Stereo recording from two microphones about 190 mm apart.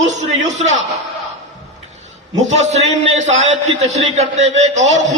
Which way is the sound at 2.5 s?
35° right (ahead or behind).